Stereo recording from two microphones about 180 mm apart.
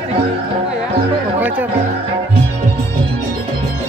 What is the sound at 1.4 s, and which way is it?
Music, 10° right (ahead or behind).